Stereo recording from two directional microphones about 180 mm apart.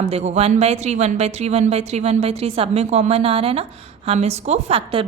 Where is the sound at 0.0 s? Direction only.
35° right (ahead or behind).